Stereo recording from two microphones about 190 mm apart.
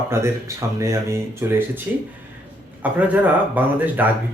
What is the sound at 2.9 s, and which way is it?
Speech, 10° right (ahead or behind).